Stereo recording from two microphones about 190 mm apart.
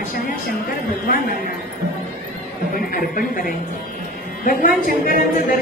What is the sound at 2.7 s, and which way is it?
Speech, 50° left (ahead or behind).